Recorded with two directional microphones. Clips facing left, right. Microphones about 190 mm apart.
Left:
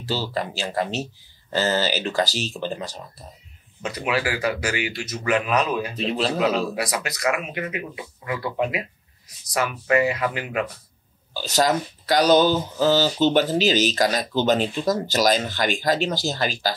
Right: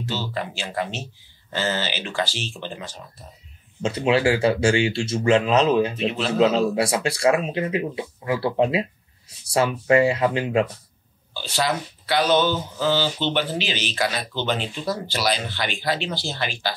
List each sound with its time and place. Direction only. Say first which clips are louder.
0.0 s speech: left 2 dB; 35° left (ahead or behind)
3.8 s speech: right 5 dB; 25° right (ahead or behind)
5.9 s speech: even; 35° left (ahead or behind)
6.3 s speech: right 4 dB; 25° right (ahead or behind)
11.3 s speech: left 4 dB; 40° left (ahead or behind)